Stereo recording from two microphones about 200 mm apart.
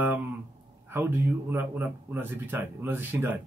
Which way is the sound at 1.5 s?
10° right (ahead or behind).